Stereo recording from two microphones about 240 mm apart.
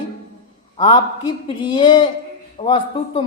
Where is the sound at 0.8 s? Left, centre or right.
Centre.